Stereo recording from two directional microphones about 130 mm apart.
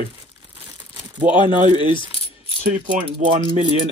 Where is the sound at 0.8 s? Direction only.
35° right (ahead or behind).